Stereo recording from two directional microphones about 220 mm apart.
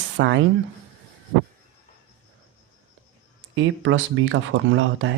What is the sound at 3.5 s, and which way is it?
Speech, 60° right (ahead or behind).